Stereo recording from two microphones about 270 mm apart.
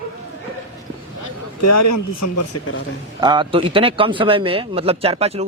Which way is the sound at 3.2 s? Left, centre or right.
Centre.